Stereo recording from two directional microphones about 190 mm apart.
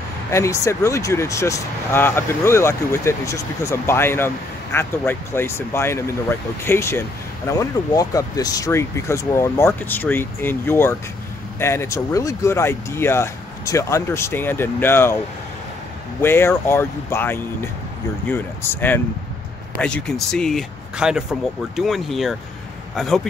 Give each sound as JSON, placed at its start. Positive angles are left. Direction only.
{"t": 0.3, "sound": "speech", "side_deg": 15}
{"t": 16.2, "sound": "speech", "side_deg": 10}